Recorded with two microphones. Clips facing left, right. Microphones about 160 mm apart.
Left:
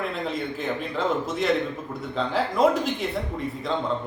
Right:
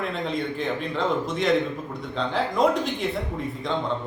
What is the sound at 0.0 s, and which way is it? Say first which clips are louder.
Speech: right 1 dB; 5° left (ahead or behind).